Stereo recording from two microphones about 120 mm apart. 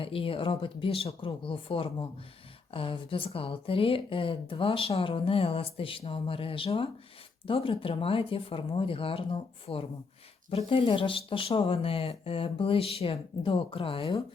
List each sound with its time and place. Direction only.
0.0 s speech: 50° left (ahead or behind)